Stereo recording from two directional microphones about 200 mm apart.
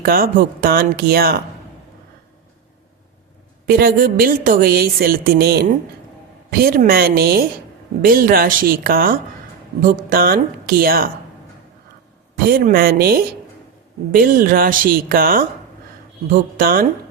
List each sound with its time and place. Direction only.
0.0 s speech: 45° right (ahead or behind)
3.8 s speech: 45° right (ahead or behind)
12.5 s speech: 50° right (ahead or behind)